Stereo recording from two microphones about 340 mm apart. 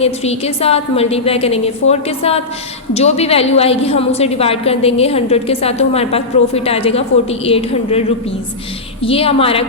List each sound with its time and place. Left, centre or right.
0.0 s a woman's voice: centre